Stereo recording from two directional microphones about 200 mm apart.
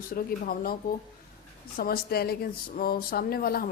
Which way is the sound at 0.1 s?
45° left (ahead or behind).